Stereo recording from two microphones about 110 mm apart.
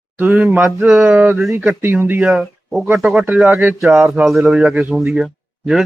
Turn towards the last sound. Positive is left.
turn(degrees=0)  # may be behind; listen again after turning